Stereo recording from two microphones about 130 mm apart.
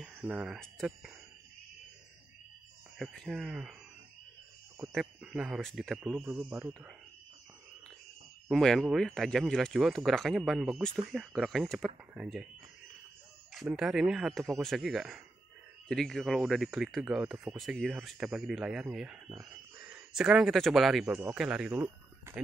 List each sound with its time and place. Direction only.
0.0 s speech: 15° right (ahead or behind)
3.0 s speech: centre (ahead or behind)
4.9 s speech: 5° right (ahead or behind)
8.5 s speech: 5° left (ahead or behind)
13.7 s speech: centre (ahead or behind)
21.0 s speech: 15° right (ahead or behind)
21.8 s a sound: 20° right (ahead or behind)